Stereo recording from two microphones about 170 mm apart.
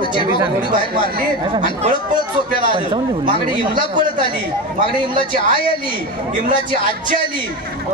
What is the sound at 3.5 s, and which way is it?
Speech, 25° right (ahead or behind).